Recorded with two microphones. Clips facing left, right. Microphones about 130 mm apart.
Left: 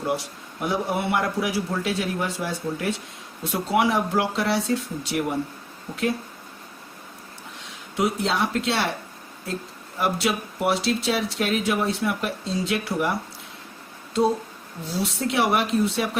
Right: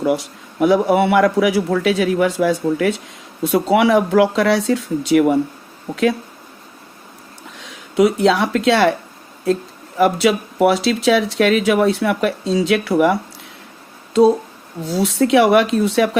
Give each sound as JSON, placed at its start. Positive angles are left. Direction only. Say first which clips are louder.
{"t": 0.6, "sound": "speech", "louder": "right 11 dB", "side_deg": -90}
{"t": 7.9, "sound": "speech", "louder": "right 10 dB", "side_deg": -90}
{"t": 10.0, "sound": "speech", "louder": "right 9 dB", "side_deg": -90}